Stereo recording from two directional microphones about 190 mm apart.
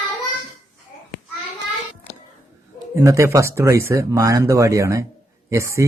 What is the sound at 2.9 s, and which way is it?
A man's voice, 15° right (ahead or behind).